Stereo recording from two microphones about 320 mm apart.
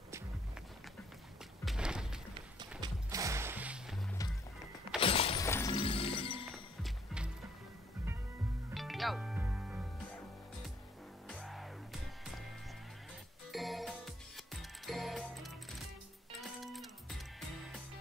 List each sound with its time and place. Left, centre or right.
1.6 s a sound: centre
2.8 s music: centre
5.0 s shatter: centre
6.5 s music: centre
8.6 s music: centre
11.2 s music: centre
13.5 s music: centre